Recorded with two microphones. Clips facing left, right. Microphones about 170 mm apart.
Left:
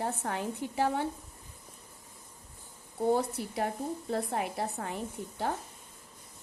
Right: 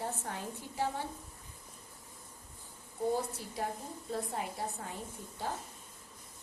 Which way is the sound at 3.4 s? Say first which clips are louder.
Left 6 dB; 65° left (ahead or behind).